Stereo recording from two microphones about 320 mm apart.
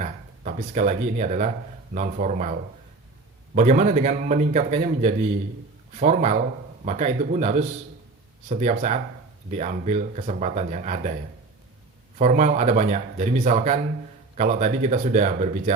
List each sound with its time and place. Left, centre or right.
0.0 s speech: right
3.5 s speech: right
12.2 s speech: right